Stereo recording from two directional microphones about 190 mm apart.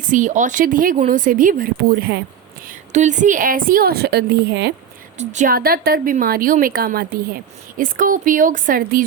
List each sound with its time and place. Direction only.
0.0 s a woman's voice: 40° right (ahead or behind)
2.6 s a woman's voice: 40° right (ahead or behind); by 4.7 s 60° right (ahead or behind)
5.1 s a woman's voice: 40° right (ahead or behind)